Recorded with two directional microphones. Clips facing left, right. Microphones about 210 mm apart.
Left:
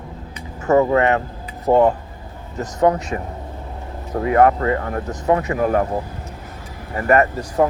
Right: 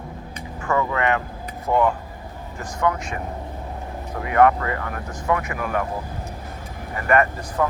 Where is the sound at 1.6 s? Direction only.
35° left (ahead or behind).